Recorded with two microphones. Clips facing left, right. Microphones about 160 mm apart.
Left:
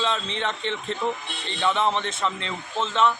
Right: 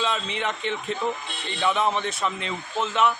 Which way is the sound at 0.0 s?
10° right (ahead or behind).